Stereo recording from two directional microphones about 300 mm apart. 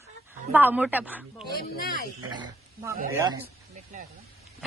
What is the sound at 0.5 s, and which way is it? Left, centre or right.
Speech, centre.